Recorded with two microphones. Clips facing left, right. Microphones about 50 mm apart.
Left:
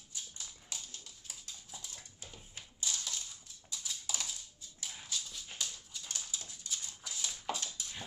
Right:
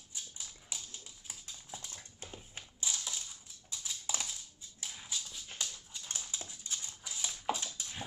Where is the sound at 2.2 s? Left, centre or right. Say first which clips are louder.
Right 6 dB; right.